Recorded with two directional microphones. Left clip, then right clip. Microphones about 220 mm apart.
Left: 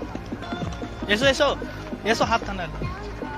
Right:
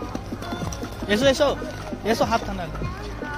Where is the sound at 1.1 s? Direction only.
5° right (ahead or behind).